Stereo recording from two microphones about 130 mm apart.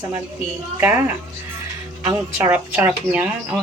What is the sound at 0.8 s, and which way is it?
Speech, 10° right (ahead or behind).